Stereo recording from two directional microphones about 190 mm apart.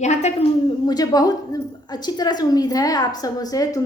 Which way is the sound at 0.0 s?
35° left (ahead or behind).